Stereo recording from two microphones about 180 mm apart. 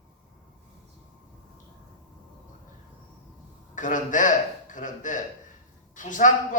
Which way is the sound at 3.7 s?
45° left (ahead or behind).